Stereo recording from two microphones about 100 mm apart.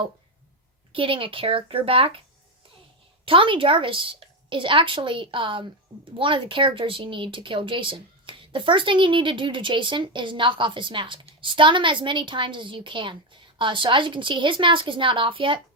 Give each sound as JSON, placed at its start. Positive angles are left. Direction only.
{"t": 0.9, "sound": "speech", "side_deg": -60}
{"t": 3.2, "sound": "speech", "side_deg": -60}